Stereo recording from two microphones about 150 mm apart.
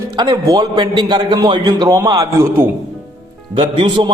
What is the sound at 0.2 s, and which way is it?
A man's voice, 25° right (ahead or behind).